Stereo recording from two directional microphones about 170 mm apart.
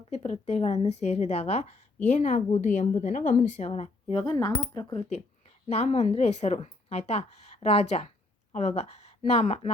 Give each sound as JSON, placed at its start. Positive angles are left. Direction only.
{"t": 0.1, "sound": "a woman's voice", "side_deg": 40}
{"t": 4.1, "sound": "speech", "side_deg": 25}